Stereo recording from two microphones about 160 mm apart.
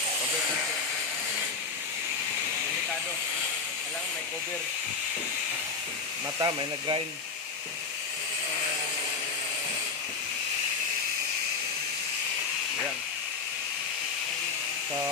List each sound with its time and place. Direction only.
6.4 s speech: 30° right (ahead or behind)